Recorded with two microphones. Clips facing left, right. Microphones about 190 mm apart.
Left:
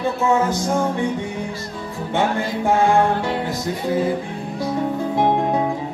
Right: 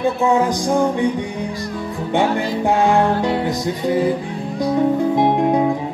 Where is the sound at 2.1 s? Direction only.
20° right (ahead or behind).